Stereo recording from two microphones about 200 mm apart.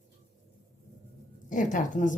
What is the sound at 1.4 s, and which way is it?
Speech, 40° left (ahead or behind).